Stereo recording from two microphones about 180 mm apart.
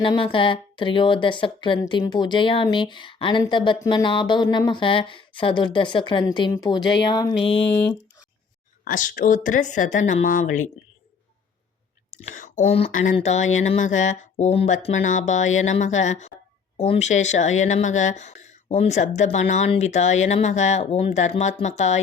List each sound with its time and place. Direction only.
0.0 s speech: 30° left (ahead or behind)
8.8 s a woman's voice: 50° left (ahead or behind)
12.1 s speech: 45° left (ahead or behind)
12.9 s a woman's voice: 45° left (ahead or behind)